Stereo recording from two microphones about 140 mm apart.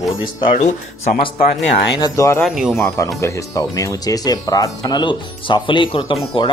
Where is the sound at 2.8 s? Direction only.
20° left (ahead or behind).